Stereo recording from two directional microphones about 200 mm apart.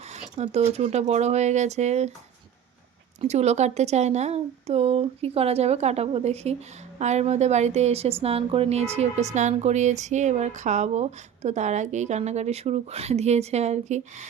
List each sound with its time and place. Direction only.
0.1 s a woman's voice: 35° right (ahead or behind)
3.2 s a woman's voice: 35° right (ahead or behind)